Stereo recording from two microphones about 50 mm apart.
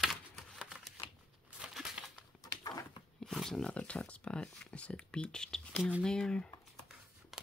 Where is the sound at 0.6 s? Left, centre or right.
Centre.